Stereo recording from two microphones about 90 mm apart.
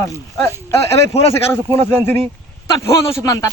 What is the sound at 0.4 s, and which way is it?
Speech, 30° left (ahead or behind).